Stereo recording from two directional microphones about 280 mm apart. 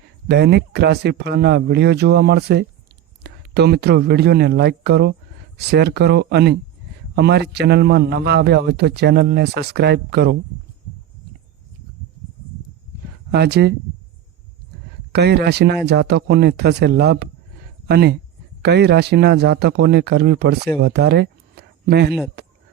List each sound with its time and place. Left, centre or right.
0.3 s a man's voice: right
13.3 s a man's voice: right
15.1 s a man's voice: right
20.8 s a sound: right